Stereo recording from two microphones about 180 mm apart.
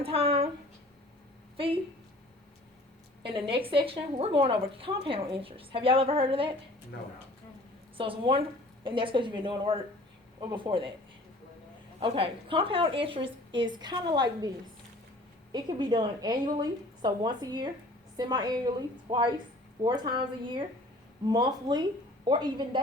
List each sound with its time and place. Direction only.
0.0 s a sound: 30° right (ahead or behind)
1.5 s speech: 30° right (ahead or behind)
3.2 s a woman's voice: 30° right (ahead or behind)
7.9 s a woman's voice: 30° right (ahead or behind)
11.9 s a woman's voice: 30° right (ahead or behind)
15.5 s a woman's voice: 25° right (ahead or behind)